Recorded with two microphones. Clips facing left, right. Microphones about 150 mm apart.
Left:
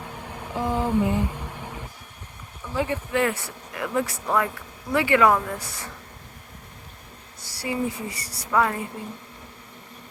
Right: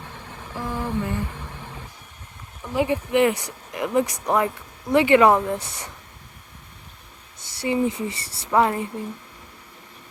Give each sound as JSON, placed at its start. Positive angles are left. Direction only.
{"t": 0.5, "sound": "a sound", "side_deg": 20}
{"t": 2.7, "sound": "speech", "side_deg": -15}
{"t": 7.3, "sound": "speech", "side_deg": -20}